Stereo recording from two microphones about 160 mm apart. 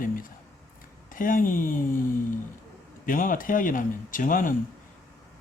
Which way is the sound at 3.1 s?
60° left (ahead or behind).